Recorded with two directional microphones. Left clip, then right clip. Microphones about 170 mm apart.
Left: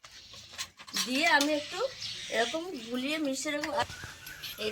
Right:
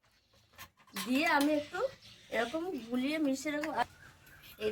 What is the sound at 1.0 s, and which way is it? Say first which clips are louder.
Speech: left 4 dB; 5° right (ahead or behind).